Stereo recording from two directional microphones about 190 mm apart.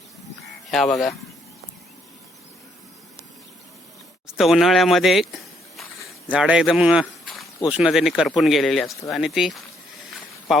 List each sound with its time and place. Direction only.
0.7 s speech: centre (ahead or behind)
4.4 s speech: centre (ahead or behind)
6.3 s speech: 5° right (ahead or behind)
7.0 s a sound: centre (ahead or behind)
7.7 s speech: centre (ahead or behind)